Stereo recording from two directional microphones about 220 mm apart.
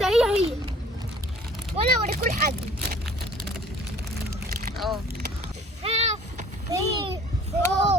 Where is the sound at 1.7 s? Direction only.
30° right (ahead or behind).